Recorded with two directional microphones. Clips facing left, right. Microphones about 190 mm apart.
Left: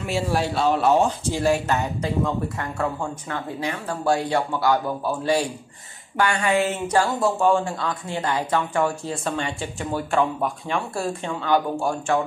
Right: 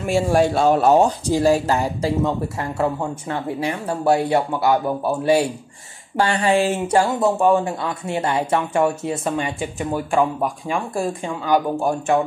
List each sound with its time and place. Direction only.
0.0 s speech: 50° right (ahead or behind); by 11.9 s 10° right (ahead or behind)